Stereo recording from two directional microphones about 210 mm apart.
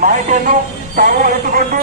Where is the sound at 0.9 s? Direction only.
40° right (ahead or behind).